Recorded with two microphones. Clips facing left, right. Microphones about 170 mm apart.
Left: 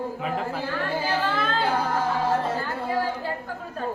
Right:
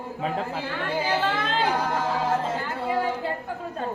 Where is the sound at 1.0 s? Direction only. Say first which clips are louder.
Even; 20° right (ahead or behind).